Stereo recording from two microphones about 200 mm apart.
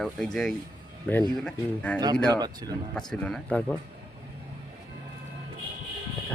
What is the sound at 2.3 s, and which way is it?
Speech, 20° right (ahead or behind).